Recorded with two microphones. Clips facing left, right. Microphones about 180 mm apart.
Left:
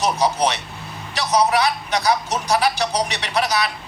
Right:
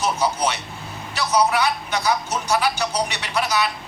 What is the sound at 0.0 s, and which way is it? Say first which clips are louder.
A man's voice: left 3 dB; 35° left (ahead or behind).